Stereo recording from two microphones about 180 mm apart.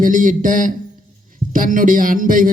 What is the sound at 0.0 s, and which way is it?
Speech, 45° right (ahead or behind).